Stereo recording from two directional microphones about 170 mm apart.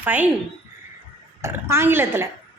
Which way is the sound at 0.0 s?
10° right (ahead or behind).